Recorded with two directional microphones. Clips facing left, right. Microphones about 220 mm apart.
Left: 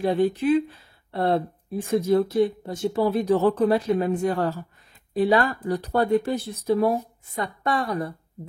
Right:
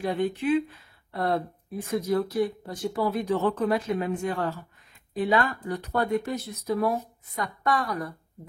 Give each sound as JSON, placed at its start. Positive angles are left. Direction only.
{"t": 0.0, "sound": "a woman's voice", "side_deg": 35}